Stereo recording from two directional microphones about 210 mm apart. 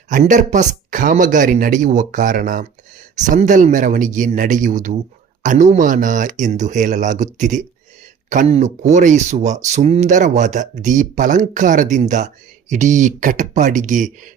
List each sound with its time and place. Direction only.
0.1 s speech: 35° right (ahead or behind)